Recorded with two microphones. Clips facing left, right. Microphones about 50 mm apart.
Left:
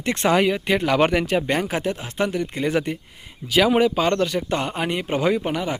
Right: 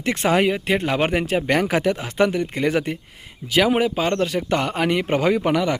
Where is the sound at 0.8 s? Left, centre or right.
Centre.